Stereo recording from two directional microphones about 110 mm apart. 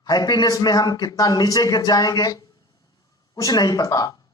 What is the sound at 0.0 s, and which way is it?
A man's voice, 35° left (ahead or behind).